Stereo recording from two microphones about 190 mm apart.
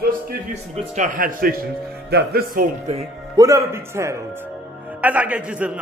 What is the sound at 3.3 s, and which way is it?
A man's voice, 15° right (ahead or behind).